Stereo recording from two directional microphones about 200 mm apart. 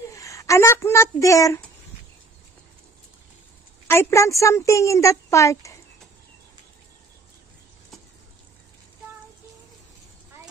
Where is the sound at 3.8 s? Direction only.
10° left (ahead or behind).